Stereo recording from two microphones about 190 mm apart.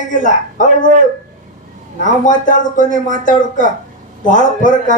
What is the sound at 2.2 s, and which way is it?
A man's voice, 45° left (ahead or behind).